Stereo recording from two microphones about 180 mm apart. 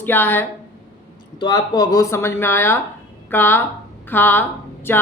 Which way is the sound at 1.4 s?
20° left (ahead or behind).